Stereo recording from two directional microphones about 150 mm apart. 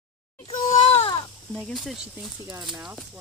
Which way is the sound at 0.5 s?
35° left (ahead or behind).